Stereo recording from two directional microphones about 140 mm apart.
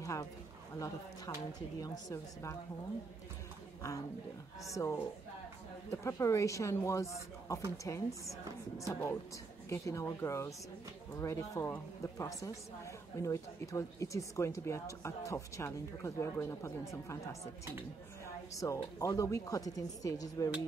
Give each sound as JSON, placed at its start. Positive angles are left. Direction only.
{"t": 0.0, "sound": "speech", "side_deg": 20}
{"t": 4.6, "sound": "speech", "side_deg": 20}